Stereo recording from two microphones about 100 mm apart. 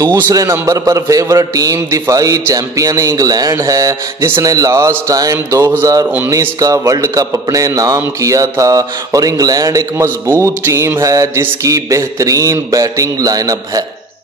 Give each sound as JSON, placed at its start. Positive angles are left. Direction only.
{"t": 0.3, "sound": "a man's voice", "side_deg": -35}
{"t": 9.9, "sound": "a man's voice", "side_deg": -25}